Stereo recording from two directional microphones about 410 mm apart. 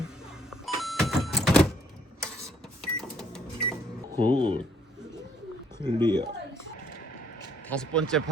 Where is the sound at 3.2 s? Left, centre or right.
Centre.